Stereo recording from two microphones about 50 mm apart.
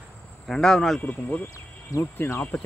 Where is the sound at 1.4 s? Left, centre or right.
Left.